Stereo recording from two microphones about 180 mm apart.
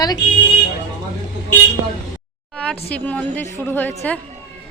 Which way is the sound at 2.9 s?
10° left (ahead or behind).